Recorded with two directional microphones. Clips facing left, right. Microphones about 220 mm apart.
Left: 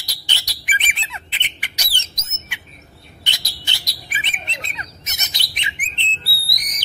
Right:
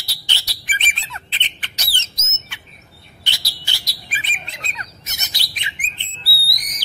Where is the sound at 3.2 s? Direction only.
20° left (ahead or behind).